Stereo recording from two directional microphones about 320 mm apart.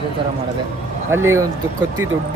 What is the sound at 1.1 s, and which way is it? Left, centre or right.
Speech, centre.